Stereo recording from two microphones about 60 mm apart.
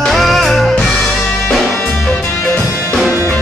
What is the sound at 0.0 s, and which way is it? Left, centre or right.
Music, centre.